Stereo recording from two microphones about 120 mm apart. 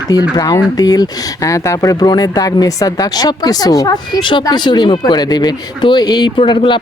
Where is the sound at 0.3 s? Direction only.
30° left (ahead or behind).